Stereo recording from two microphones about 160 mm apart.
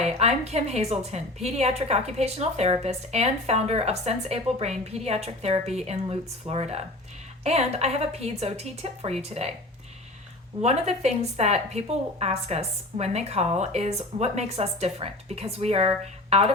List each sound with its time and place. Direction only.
0.2 s a woman's voice: 40° right (ahead or behind)
10.6 s a woman's voice: 40° right (ahead or behind)